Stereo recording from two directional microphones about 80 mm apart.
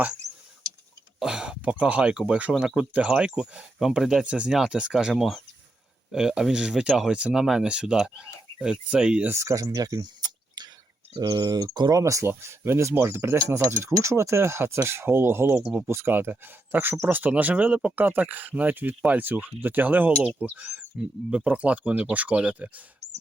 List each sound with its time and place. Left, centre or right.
1.2 s a sound: centre
1.8 s speech: centre
4.5 s speech: centre
9.3 s speech: right
9.7 s a sound: right
11.3 s speech: right; by 22.8 s centre